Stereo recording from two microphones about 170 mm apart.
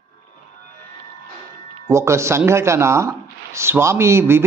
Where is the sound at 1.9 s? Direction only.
15° right (ahead or behind).